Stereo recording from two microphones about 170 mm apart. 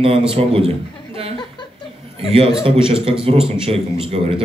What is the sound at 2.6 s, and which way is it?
Speech, 35° right (ahead or behind).